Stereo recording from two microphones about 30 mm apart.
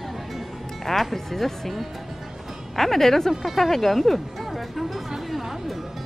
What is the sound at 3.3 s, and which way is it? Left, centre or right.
Speech, centre.